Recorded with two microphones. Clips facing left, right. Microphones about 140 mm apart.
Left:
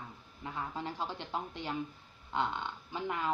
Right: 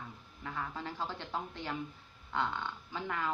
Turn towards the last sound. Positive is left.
turn(degrees=20)  # may be behind; listen again after turning